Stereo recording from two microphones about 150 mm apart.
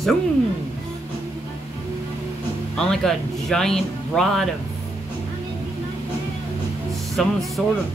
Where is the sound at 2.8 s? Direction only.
5° left (ahead or behind).